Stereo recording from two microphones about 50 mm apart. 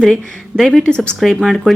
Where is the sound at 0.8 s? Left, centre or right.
Centre.